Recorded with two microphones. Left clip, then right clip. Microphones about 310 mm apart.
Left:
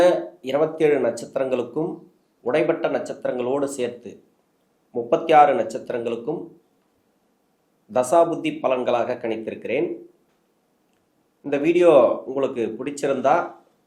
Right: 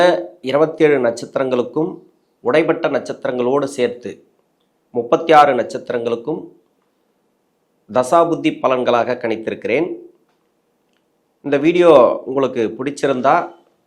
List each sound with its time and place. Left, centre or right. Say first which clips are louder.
0.0 s speech: right 4 dB; right
7.9 s speech: right 4 dB; right
11.4 s speech: right 5 dB; right